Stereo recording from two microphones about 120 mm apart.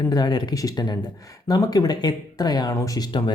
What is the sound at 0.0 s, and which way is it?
Speech, 35° left (ahead or behind).